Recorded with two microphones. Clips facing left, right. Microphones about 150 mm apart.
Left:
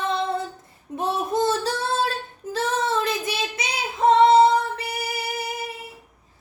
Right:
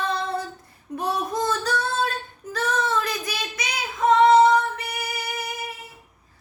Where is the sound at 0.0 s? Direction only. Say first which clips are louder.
Left 2 dB; 25° left (ahead or behind).